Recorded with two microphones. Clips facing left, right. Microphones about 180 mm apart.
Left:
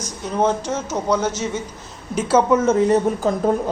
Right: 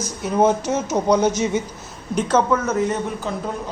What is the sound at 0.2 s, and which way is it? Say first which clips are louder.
Speech: right 2 dB; 10° right (ahead or behind).